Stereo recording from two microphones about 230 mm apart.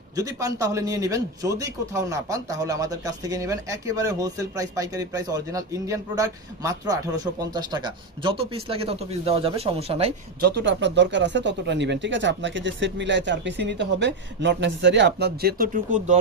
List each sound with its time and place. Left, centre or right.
0.2 s a man's voice: centre
10.4 s speech: right